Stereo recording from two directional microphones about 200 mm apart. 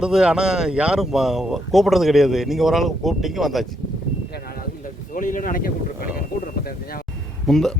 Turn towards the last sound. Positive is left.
turn(degrees=0)  # may be behind; listen again after turning